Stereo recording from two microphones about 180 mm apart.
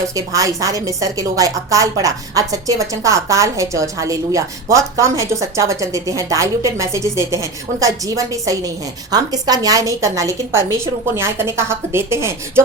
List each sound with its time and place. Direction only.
0.1 s a woman's voice: 20° right (ahead or behind)